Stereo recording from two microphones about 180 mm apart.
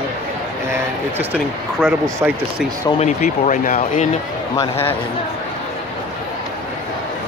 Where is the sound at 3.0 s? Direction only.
40° left (ahead or behind).